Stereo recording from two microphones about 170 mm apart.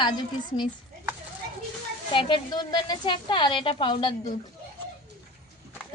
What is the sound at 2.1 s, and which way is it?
A woman's voice, 30° left (ahead or behind).